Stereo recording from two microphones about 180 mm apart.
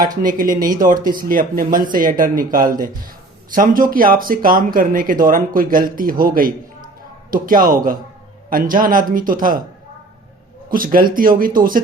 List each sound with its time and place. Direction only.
0.2 s speech: 50° right (ahead or behind)
10.7 s speech: 50° right (ahead or behind)